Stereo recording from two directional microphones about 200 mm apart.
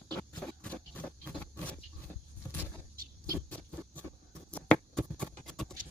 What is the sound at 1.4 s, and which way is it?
Wild animals, 5° left (ahead or behind).